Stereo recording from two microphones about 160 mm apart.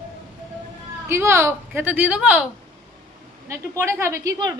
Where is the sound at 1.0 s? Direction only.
15° right (ahead or behind).